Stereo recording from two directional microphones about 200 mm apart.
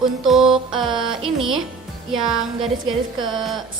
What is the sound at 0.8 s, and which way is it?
Music, centre (ahead or behind).